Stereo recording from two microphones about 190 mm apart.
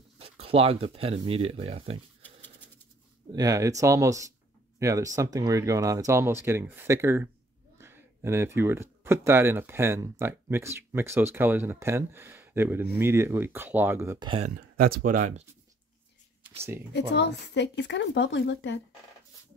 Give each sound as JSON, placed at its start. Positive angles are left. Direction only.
{"t": 0.2, "sound": "speech", "side_deg": -30}
{"t": 3.3, "sound": "speech", "side_deg": -20}
{"t": 14.2, "sound": "speech", "side_deg": -30}
{"t": 14.8, "sound": "speech", "side_deg": -50}
{"t": 17.1, "sound": "speech", "side_deg": 65}